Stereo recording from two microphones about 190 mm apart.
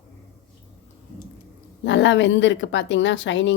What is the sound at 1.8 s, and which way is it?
A woman's voice, 70° left (ahead or behind).